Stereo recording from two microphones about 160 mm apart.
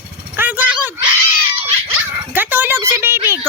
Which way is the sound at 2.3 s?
10° right (ahead or behind).